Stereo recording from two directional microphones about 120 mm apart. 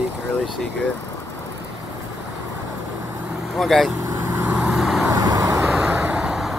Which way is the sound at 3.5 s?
Centre (ahead or behind).